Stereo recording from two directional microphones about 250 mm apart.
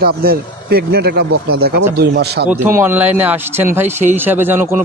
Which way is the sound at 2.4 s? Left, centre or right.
Centre.